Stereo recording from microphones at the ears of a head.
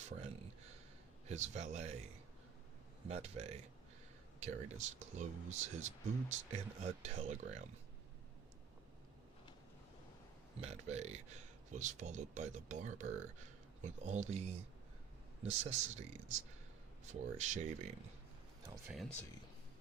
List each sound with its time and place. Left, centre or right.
0.0 s a sound: right
1.3 s speech: right
10.6 s speech: right